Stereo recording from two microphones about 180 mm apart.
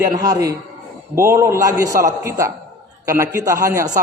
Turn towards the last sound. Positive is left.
turn(degrees=-15)  # may be behind; listen again after turning